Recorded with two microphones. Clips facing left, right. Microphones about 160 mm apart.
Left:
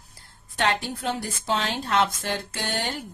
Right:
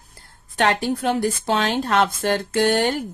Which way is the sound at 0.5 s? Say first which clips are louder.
Right 6 dB; 70° right (ahead or behind).